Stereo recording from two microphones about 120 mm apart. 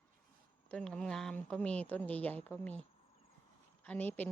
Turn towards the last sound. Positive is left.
turn(degrees=15)  # may be behind; listen again after turning